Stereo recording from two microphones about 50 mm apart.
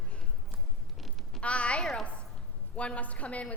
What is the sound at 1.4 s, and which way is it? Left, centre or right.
A woman's voice, left.